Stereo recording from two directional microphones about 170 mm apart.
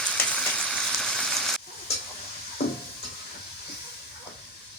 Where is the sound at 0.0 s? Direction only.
5° left (ahead or behind).